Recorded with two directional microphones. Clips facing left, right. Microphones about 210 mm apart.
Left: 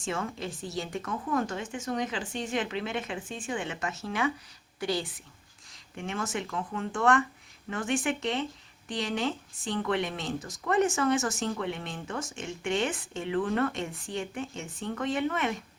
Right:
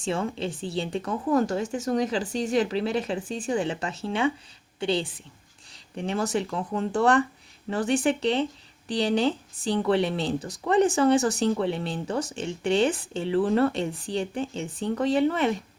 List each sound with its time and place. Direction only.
0.0 s a woman's voice: 30° right (ahead or behind)